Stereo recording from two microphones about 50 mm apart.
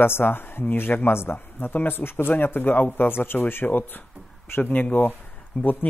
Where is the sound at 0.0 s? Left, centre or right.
Left.